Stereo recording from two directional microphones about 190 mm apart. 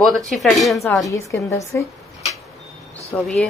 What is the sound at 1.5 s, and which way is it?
Speech, 15° left (ahead or behind).